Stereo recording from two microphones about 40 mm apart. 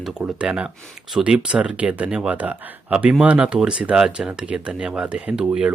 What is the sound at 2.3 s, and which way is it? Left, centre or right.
Speech, right.